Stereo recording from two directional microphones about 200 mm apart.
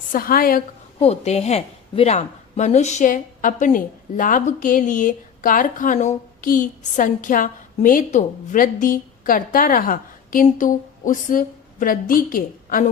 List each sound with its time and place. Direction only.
0.1 s a woman's voice: 45° left (ahead or behind)
0.9 s a woman's voice: 30° left (ahead or behind)